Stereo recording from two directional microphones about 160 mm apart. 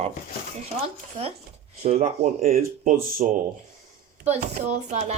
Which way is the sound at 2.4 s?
65° right (ahead or behind).